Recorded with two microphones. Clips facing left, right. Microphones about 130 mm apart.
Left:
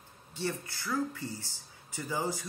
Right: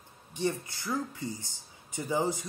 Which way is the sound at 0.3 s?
20° right (ahead or behind).